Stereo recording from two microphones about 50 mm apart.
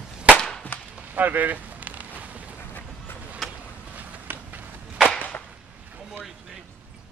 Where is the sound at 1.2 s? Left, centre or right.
Right.